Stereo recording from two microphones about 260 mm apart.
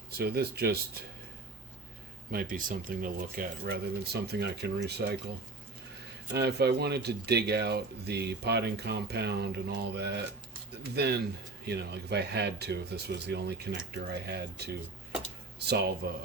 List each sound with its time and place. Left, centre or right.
0.2 s speech: right
2.3 s speech: right
6.3 s speech: right